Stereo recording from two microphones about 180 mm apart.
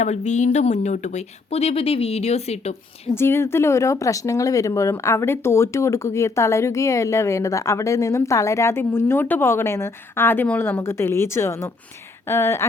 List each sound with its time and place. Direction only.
0.0 s speech: 40° left (ahead or behind)
3.2 s speech: 15° left (ahead or behind)